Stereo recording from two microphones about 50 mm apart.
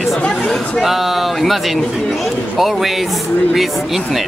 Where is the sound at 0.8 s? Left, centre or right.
Centre.